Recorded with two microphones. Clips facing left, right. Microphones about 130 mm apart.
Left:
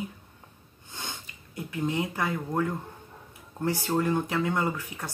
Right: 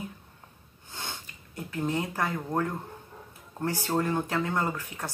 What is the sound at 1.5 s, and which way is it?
Speech, 15° left (ahead or behind).